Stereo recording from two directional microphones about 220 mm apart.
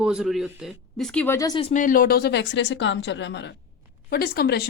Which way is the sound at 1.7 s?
35° left (ahead or behind).